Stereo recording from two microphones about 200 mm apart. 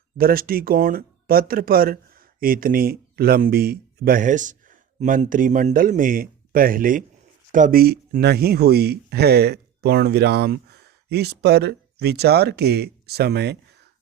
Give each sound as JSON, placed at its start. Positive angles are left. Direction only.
{"t": 0.2, "sound": "speech", "side_deg": -45}